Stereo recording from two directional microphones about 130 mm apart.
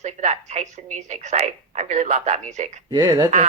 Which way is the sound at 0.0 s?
65° right (ahead or behind).